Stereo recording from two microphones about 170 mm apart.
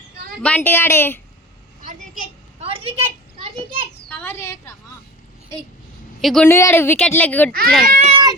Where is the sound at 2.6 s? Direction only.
35° right (ahead or behind).